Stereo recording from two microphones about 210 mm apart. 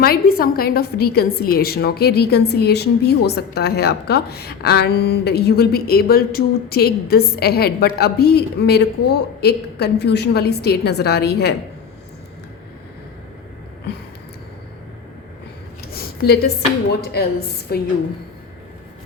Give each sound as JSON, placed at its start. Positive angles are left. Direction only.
{"t": 0.0, "sound": "a woman's voice", "side_deg": 45}
{"t": 16.0, "sound": "a sound", "side_deg": 50}
{"t": 17.1, "sound": "a woman's voice", "side_deg": 50}